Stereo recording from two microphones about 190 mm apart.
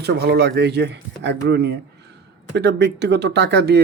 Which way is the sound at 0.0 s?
60° right (ahead or behind).